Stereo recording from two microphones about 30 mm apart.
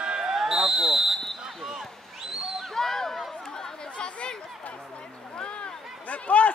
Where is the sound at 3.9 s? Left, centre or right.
Left.